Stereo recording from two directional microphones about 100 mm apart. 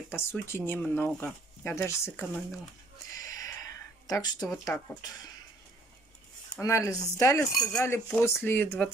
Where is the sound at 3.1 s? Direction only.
35° left (ahead or behind).